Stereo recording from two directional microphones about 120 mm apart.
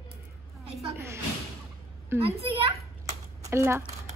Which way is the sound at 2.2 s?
50° right (ahead or behind).